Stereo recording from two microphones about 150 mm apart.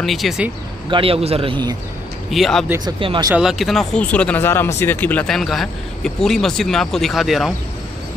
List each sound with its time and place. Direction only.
0.0 s speech: centre (ahead or behind)
0.8 s speech: 35° right (ahead or behind)
2.3 s speech: centre (ahead or behind)
2.8 s speech: 30° right (ahead or behind)
3.3 s speech: 5° right (ahead or behind)